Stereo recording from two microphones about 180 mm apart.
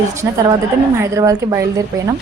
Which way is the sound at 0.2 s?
15° right (ahead or behind).